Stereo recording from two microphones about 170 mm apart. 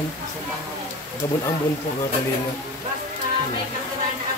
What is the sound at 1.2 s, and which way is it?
Speech, 15° left (ahead or behind).